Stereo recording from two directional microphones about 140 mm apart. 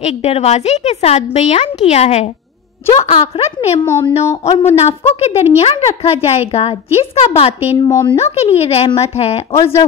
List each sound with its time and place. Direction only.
0.0 s a woman's voice: 50° left (ahead or behind)
7.8 s speech: 25° left (ahead or behind)
8.2 s a woman's voice: 50° left (ahead or behind)
9.5 s speech: 20° left (ahead or behind)